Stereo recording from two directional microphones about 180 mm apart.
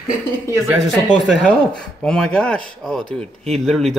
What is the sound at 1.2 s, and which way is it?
Speech, centre (ahead or behind).